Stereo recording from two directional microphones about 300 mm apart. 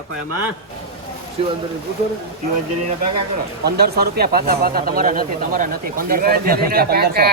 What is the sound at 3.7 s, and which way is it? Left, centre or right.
Speech, right.